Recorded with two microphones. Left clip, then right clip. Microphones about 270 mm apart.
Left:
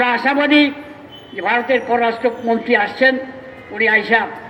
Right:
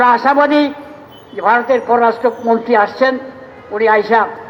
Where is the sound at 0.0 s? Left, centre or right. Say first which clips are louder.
Right 5 dB; right.